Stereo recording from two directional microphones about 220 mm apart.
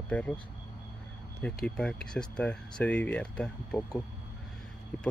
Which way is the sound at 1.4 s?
5° left (ahead or behind).